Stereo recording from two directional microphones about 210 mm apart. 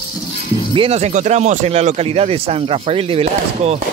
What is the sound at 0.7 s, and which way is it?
Speech, 30° right (ahead or behind).